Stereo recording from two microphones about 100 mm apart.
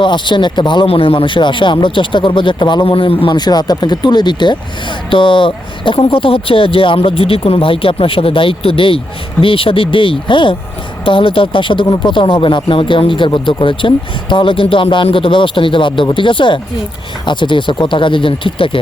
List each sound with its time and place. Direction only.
0.0 s speech: 55° left (ahead or behind)
0.9 s speech: 65° left (ahead or behind)
2.8 s a man's voice: 65° left (ahead or behind)
3.3 s speech: 45° left (ahead or behind); by 18.8 s 60° left (ahead or behind)